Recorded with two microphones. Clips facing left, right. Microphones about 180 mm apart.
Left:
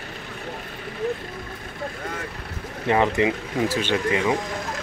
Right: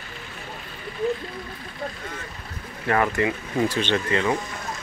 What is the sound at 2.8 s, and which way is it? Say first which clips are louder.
Speech: left 2 dB; 20° left (ahead or behind).